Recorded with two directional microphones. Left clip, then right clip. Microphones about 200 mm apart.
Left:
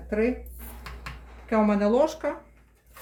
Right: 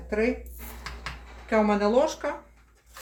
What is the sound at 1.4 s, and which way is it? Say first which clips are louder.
Speech: even; 25° left (ahead or behind).